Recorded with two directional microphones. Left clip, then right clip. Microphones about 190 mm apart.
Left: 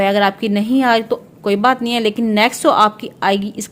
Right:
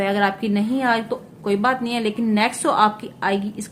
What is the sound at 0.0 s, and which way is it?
A woman's voice, 45° left (ahead or behind).